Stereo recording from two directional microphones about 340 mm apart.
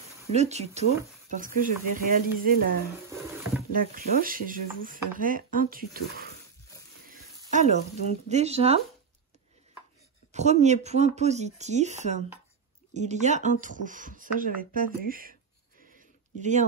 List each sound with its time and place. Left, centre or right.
0.2 s speech: centre
7.5 s speech: centre
10.3 s speech: centre
16.3 s speech: right